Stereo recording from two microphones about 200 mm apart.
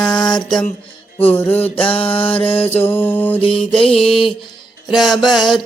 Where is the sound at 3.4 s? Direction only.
25° left (ahead or behind).